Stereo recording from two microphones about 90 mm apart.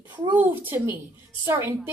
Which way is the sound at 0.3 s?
20° right (ahead or behind).